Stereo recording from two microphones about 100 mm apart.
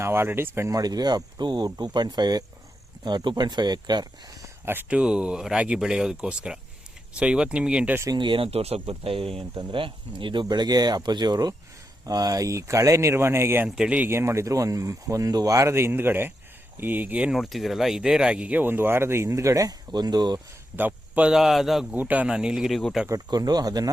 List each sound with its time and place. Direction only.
0.0 s speech: 25° right (ahead or behind)
0.8 s speech: 40° right (ahead or behind)
4.6 s speech: 20° right (ahead or behind)
8.1 s speech: 55° right (ahead or behind); by 9.3 s 70° right (ahead or behind)
9.6 s speech: 60° right (ahead or behind); by 13.7 s 25° right (ahead or behind)
13.7 s speech: 5° right (ahead or behind)
14.1 s speech: 25° right (ahead or behind)
19.9 s speech: 45° right (ahead or behind)
20.7 s speech: 15° right (ahead or behind)
21.3 s speech: 5° right (ahead or behind)
21.9 s speech: 15° right (ahead or behind); by 23.0 s centre (ahead or behind)
23.0 s speech: 40° right (ahead or behind)